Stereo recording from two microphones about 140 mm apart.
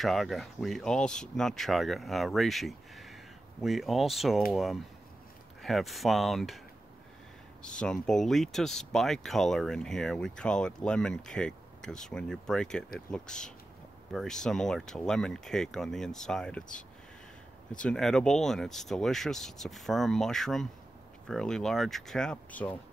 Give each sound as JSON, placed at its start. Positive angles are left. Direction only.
{"t": 0.0, "sound": "speech", "side_deg": 0}
{"t": 7.6, "sound": "speech", "side_deg": 5}